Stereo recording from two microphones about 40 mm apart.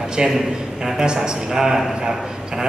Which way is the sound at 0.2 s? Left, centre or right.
Centre.